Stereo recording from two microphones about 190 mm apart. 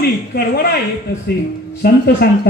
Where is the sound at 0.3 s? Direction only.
55° left (ahead or behind).